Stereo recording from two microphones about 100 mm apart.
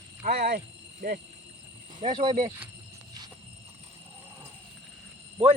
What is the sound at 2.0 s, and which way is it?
Speech, 60° right (ahead or behind).